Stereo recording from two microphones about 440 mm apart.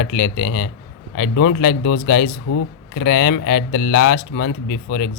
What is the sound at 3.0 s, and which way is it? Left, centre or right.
Speech, left.